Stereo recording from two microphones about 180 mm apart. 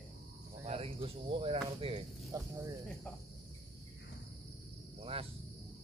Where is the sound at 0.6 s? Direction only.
35° right (ahead or behind).